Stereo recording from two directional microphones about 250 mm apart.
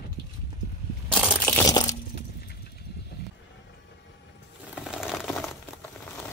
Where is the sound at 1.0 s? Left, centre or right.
Centre.